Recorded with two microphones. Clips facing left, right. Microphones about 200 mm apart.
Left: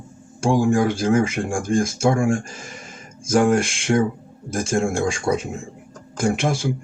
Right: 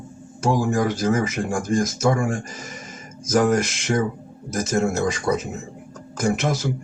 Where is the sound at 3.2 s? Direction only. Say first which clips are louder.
Left 1 dB; 30° left (ahead or behind).